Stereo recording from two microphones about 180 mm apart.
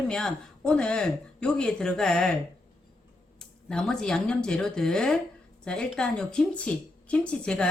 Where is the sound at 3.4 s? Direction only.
5° left (ahead or behind).